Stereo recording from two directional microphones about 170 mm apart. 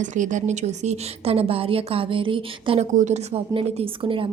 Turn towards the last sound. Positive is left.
turn(degrees=-30)  # may be behind; listen again after turning